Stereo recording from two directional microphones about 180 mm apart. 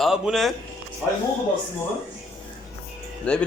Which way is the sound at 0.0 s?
Centre (ahead or behind).